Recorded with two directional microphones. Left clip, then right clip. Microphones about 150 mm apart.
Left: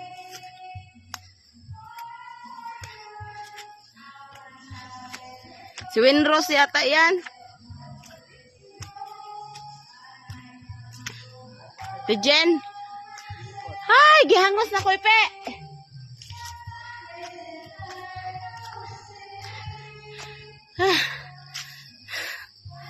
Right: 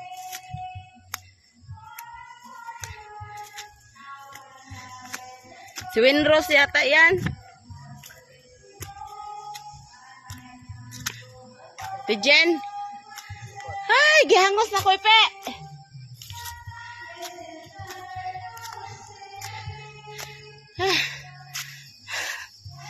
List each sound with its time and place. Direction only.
5.9 s a woman's voice: 30° left (ahead or behind)
12.1 s a child's voice: 35° left (ahead or behind)
13.8 s music: 45° left (ahead or behind); by 15.6 s 20° left (ahead or behind)
18.5 s music: centre (ahead or behind)
19.5 s music: 40° left (ahead or behind)
22.0 s music: 20° left (ahead or behind)